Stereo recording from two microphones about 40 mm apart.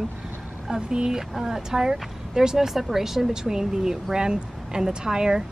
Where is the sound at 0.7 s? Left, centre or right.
Centre.